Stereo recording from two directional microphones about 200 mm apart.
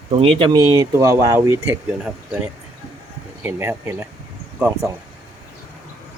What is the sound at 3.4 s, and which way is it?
Speech, 10° right (ahead or behind).